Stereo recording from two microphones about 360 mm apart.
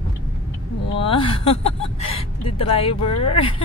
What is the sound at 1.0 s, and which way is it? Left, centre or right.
A woman's voice, centre.